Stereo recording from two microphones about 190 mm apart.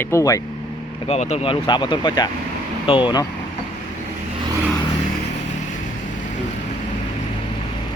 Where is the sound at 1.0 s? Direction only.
35° left (ahead or behind).